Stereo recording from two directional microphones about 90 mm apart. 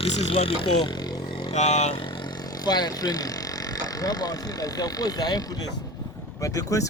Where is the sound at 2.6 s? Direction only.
50° left (ahead or behind).